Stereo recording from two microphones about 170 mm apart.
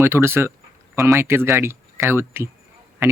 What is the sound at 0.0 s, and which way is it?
Speech, 15° right (ahead or behind).